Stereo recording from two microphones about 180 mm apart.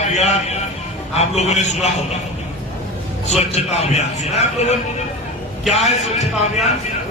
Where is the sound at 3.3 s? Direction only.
35° left (ahead or behind).